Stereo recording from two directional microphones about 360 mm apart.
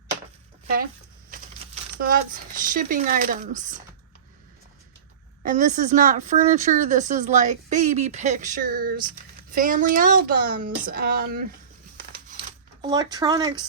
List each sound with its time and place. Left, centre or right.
2.0 s speech: right
5.4 s speech: right
12.1 s a sound: right